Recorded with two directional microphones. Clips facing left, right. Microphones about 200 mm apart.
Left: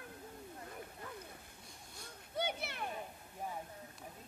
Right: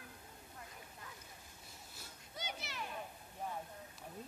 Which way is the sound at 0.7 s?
55° left (ahead or behind).